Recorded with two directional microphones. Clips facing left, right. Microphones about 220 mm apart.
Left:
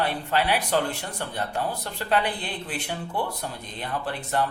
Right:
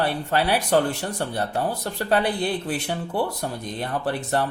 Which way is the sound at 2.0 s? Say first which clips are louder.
Right 4 dB; 40° right (ahead or behind).